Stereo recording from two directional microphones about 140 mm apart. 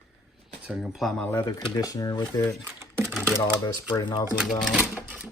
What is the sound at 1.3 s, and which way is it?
Speech, 30° left (ahead or behind).